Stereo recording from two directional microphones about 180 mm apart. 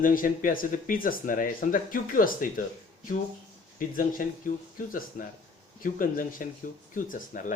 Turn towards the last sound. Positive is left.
turn(degrees=50)  # may be behind; listen again after turning